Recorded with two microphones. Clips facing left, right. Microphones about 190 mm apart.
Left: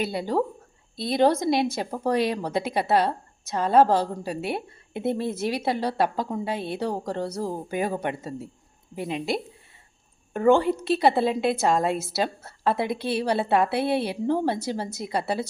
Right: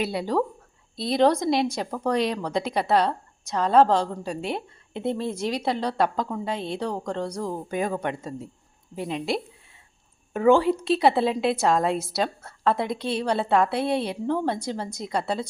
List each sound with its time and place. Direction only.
0.0 s a woman's voice: centre (ahead or behind)